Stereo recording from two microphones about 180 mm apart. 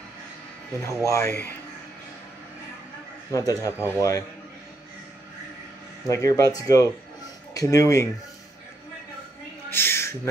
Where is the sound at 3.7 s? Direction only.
10° right (ahead or behind).